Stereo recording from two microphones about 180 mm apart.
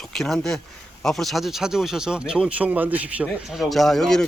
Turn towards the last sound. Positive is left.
turn(degrees=0)  # may be behind; listen again after turning